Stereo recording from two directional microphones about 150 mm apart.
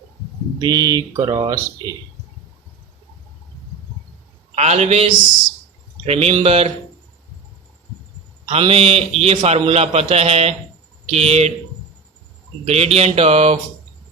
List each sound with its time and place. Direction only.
0.6 s speech: 25° right (ahead or behind)
4.5 s a man's voice: 50° right (ahead or behind)
6.1 s a man's voice: 45° right (ahead or behind)
8.4 s a man's voice: 40° right (ahead or behind)
12.6 s a man's voice: 45° right (ahead or behind)